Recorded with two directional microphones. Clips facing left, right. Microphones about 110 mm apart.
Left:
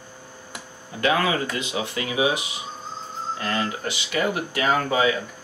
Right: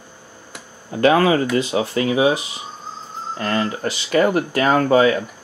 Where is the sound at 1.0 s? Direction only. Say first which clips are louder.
Right 7 dB; 40° right (ahead or behind).